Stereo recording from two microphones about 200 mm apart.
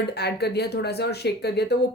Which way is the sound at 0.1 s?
55° left (ahead or behind).